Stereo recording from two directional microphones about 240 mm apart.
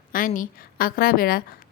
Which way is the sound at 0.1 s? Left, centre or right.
Left.